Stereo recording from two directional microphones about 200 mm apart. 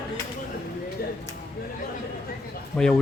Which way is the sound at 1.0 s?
50° left (ahead or behind).